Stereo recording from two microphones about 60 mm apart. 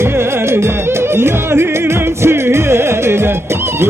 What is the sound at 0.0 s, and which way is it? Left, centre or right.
Music, right.